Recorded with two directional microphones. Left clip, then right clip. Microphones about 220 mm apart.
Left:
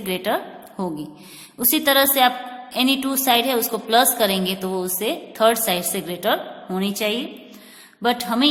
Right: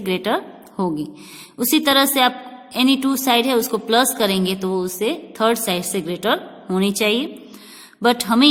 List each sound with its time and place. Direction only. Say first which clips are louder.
0.0 s a woman's voice: right 2 dB; 25° right (ahead or behind)